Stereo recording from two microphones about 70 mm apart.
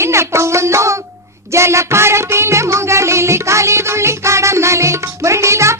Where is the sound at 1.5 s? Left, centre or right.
Right.